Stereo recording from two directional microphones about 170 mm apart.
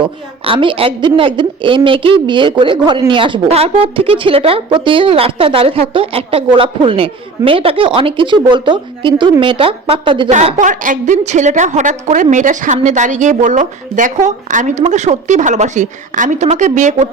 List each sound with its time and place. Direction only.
0.0 s a woman's voice: 30° right (ahead or behind)
10.2 s a woman's voice: 45° right (ahead or behind)